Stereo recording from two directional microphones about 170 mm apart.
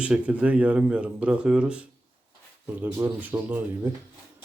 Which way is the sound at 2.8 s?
10° right (ahead or behind).